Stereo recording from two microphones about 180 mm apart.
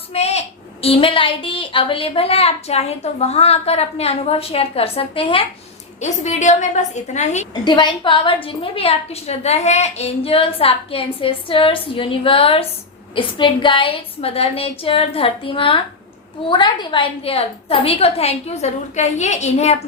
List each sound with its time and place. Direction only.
0.1 s a woman's voice: 35° left (ahead or behind)
7.6 s a woman's voice: 25° left (ahead or behind)